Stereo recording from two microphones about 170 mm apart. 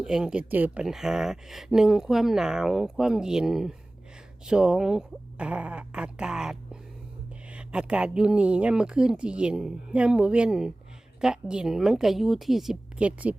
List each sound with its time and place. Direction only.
0.0 s speech: 5° right (ahead or behind)